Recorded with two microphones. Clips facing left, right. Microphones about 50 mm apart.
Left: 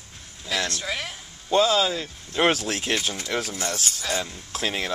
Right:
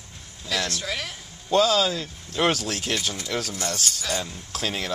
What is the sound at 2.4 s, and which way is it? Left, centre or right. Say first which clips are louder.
Speech: left 2 dB; left.